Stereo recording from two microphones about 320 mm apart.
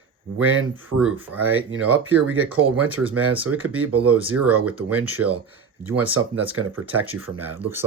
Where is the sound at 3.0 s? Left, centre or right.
Right.